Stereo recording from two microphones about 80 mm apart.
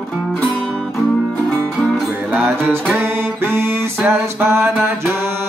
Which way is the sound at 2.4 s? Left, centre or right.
Right.